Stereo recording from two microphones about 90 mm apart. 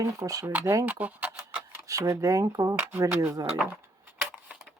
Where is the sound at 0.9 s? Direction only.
20° right (ahead or behind).